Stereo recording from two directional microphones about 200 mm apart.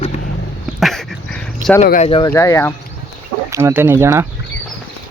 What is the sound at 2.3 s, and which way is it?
Speech, 15° left (ahead or behind).